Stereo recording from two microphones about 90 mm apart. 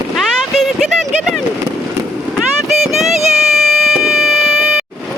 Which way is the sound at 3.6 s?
Centre (ahead or behind).